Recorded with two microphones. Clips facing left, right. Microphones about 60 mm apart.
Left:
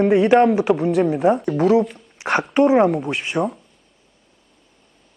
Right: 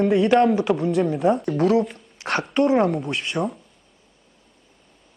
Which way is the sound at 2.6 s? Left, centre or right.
Centre.